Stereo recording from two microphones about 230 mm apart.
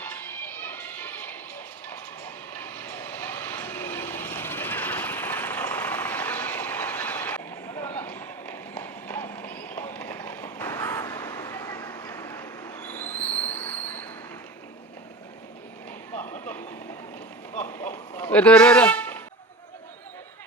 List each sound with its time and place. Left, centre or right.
0.0 s music: centre
1.9 s train: centre
9.8 s run: centre
12.2 s train: centre
16.1 s vehicle: centre
17.6 s vehicle: centre
18.2 s a sound: centre